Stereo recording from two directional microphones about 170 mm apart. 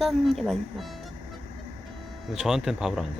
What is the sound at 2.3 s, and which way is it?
Speech, 5° right (ahead or behind).